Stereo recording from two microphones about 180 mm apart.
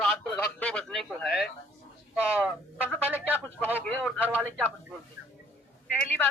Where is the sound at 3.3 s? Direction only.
10° left (ahead or behind).